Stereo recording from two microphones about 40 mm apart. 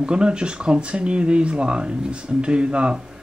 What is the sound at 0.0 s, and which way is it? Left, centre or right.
Speech, right.